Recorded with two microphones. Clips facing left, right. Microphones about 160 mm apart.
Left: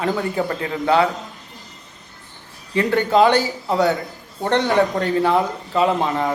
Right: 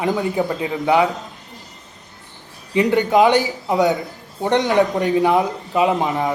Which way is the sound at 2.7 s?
15° right (ahead or behind).